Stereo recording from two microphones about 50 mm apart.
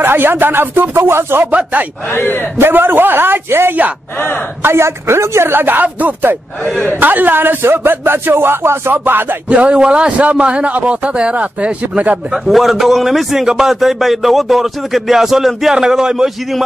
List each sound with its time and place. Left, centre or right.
0.0 s speech: right
2.1 s a man's voice: left
2.6 s speech: right
4.6 s speech: right
9.5 s speech: right
12.3 s a man's voice: centre